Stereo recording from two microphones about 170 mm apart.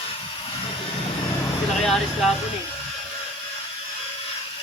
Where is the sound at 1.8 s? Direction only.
Centre (ahead or behind).